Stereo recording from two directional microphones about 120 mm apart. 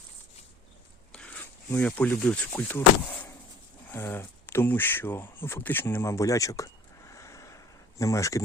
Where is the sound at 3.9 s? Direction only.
20° left (ahead or behind).